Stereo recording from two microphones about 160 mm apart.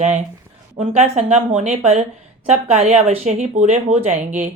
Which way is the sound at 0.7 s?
40° right (ahead or behind).